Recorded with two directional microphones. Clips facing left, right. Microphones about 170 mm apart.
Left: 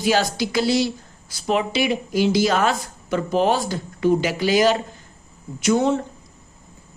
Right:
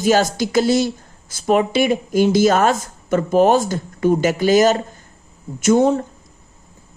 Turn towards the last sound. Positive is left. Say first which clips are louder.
# right 4 dB
turn(degrees=-45)  # may be behind; listen again after turning